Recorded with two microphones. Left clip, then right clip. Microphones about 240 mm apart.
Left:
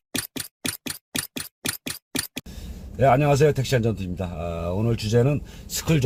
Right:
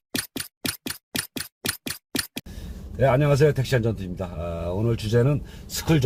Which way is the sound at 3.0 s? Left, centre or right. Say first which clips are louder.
Left 2 dB; left.